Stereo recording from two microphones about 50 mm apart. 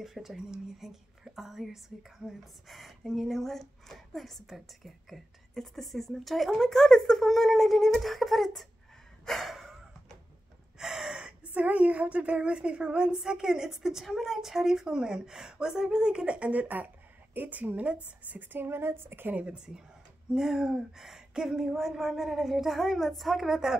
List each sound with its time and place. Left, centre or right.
0.0 s speech: centre
9.2 s gasp: centre
10.8 s gasp: centre
11.5 s a woman's voice: right
18.3 s a woman's voice: right
19.3 s a woman's voice: right